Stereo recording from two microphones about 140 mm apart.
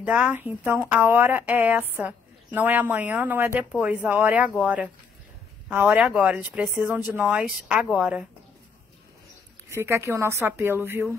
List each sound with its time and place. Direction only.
0.0 s a woman's voice: 10° right (ahead or behind)
9.7 s a woman's voice: 20° right (ahead or behind)